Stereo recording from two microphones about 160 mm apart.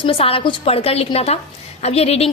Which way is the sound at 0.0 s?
35° left (ahead or behind).